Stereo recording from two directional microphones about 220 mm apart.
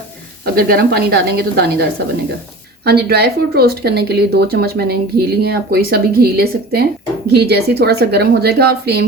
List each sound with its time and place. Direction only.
0.4 s speech: 45° right (ahead or behind)
2.8 s speech: 45° right (ahead or behind)